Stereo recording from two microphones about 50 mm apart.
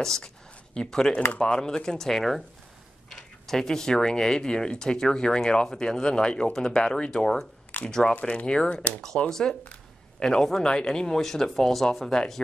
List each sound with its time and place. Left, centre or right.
0.0 s speech: centre
7.7 s a sound: left
8.1 s speech: left; by 12.4 s centre